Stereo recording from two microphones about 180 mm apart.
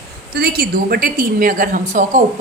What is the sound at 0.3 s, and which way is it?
Speech, 60° right (ahead or behind).